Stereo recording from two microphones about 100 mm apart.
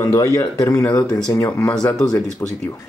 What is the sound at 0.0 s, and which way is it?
Speech, 35° left (ahead or behind).